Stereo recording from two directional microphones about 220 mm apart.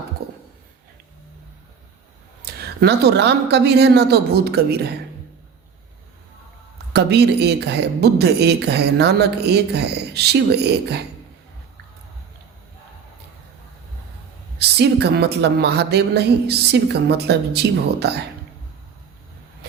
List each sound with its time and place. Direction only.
0.2 s a sound: 45° right (ahead or behind)
2.4 s speech: 50° right (ahead or behind)
6.9 s speech: 50° right (ahead or behind)
14.6 s speech: 50° right (ahead or behind)